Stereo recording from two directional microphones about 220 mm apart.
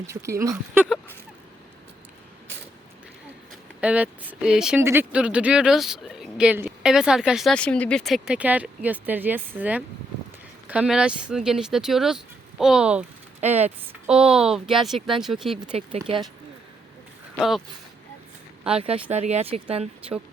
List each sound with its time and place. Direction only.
0.1 s speech: 15° right (ahead or behind)
3.5 s speech: 5° right (ahead or behind)
15.6 s speech: 30° right (ahead or behind)
18.8 s speech: 25° right (ahead or behind)